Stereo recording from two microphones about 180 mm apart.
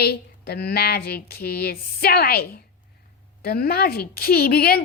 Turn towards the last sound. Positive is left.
turn(degrees=60)  # may be behind; listen again after turning